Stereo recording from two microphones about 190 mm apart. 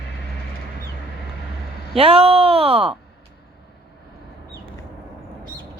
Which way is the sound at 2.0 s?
30° right (ahead or behind).